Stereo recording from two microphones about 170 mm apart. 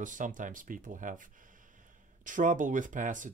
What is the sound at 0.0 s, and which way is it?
Speech, 50° right (ahead or behind).